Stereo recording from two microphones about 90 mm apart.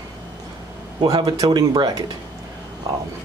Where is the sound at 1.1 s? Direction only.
50° right (ahead or behind).